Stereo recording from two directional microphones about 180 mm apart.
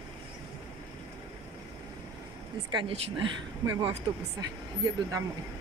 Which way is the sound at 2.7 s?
25° right (ahead or behind).